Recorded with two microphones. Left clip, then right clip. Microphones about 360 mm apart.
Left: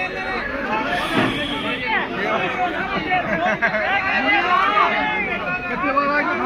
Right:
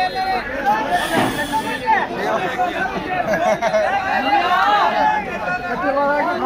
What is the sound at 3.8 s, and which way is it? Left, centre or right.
Speech, right.